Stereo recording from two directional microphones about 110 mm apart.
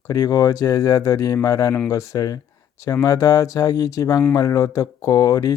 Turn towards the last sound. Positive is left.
turn(degrees=30)  # may be behind; listen again after turning